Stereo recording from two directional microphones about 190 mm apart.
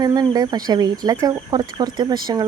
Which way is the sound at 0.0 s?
20° right (ahead or behind).